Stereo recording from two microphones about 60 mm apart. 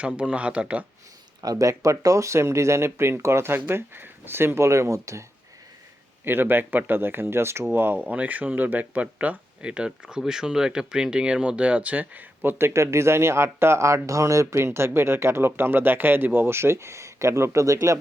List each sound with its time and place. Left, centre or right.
0.0 s speech: right
1.4 s speech: right
6.2 s speech: right
7.7 s speech: right
14.6 s speech: right